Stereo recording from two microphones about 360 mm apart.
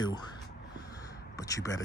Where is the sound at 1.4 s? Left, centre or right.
Centre.